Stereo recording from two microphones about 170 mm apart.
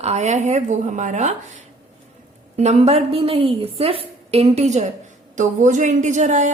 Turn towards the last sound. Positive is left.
turn(degrees=-45)  # may be behind; listen again after turning